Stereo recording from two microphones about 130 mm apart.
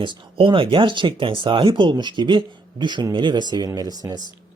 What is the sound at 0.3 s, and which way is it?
Speech, 45° right (ahead or behind).